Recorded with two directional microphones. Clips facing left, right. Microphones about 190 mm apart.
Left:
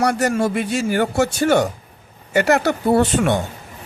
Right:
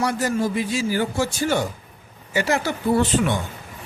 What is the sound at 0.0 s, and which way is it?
A man's voice, 70° left (ahead or behind).